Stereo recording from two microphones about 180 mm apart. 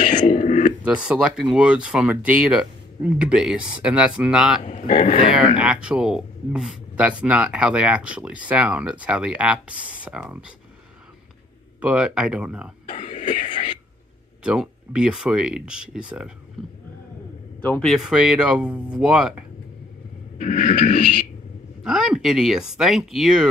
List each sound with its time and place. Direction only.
0.0 s a sound: 45° left (ahead or behind)
0.8 s speech: 5° right (ahead or behind)
4.6 s speech: 40° left (ahead or behind)
5.6 s speech: 5° right (ahead or behind)
11.8 s speech: 5° right (ahead or behind)
12.8 s throat clearing: 40° left (ahead or behind)
14.4 s speech: 5° right (ahead or behind)
17.6 s speech: 10° left (ahead or behind)
20.3 s speech: 40° left (ahead or behind)
21.8 s speech: 5° right (ahead or behind)